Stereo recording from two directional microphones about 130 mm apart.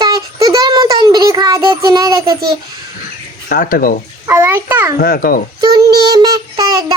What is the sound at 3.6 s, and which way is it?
Speech, 90° left.